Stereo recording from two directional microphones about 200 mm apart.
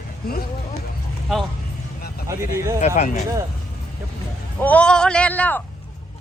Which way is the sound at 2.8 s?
35° left (ahead or behind).